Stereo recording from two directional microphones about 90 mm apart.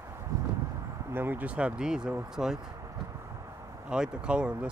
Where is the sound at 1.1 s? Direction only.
25° right (ahead or behind); by 2.6 s 5° right (ahead or behind).